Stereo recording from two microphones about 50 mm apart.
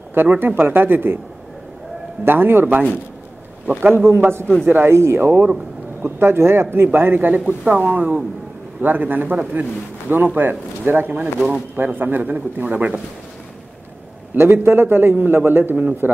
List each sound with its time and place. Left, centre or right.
0.1 s a man's voice: right
2.2 s a man's voice: right
4.1 s a man's voice: right
11.3 s speech: right
11.7 s a man's voice: right
14.3 s a man's voice: right